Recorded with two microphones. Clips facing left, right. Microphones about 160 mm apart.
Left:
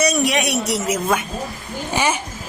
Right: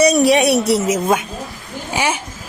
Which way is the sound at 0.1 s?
35° right (ahead or behind).